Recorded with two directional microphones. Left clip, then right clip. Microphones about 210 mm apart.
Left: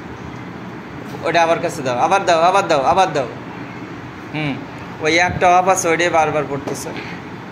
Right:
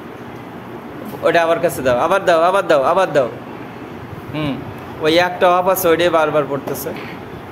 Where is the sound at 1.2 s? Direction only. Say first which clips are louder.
Right 1 dB; 35° right (ahead or behind).